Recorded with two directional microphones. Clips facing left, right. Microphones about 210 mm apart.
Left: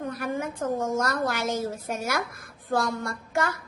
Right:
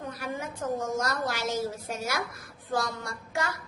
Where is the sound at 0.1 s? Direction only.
55° left (ahead or behind).